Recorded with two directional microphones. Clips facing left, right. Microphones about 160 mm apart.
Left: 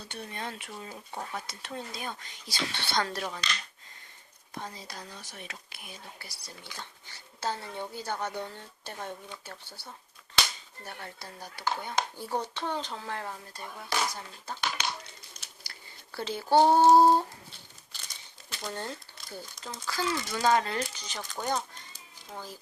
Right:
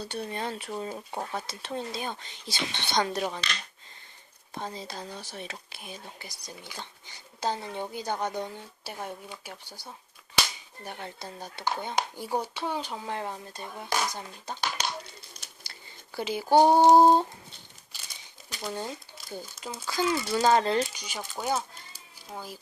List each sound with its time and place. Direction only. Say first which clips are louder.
0.0 s speech: right 6 dB; 35° right (ahead or behind)
4.5 s speech: right 4 dB; 25° right (ahead or behind)
15.6 s a sound: even; 25° right (ahead or behind)
16.1 s speech: right 2 dB; 10° right (ahead or behind)
18.6 s speech: right 3 dB; 10° right (ahead or behind)
20.3 s speech: right 3 dB; 30° right (ahead or behind)
20.9 s speech: right 2 dB; 10° right (ahead or behind)